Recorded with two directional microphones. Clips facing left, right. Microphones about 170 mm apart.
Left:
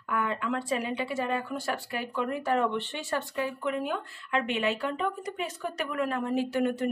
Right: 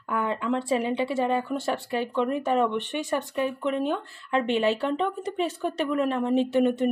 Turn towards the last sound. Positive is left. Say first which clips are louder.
# right 5 dB
turn(degrees=-20)  # may be behind; listen again after turning